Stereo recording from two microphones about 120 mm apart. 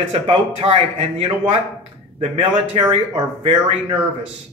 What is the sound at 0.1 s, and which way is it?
Speech, 55° right (ahead or behind).